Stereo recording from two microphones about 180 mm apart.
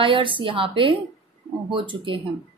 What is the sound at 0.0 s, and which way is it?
A woman's voice, 30° right (ahead or behind).